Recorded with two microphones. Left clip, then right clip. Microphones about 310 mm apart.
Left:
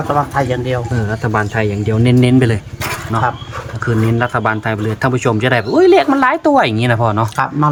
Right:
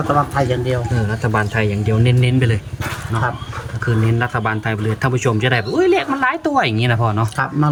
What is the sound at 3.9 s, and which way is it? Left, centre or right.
Speech, centre.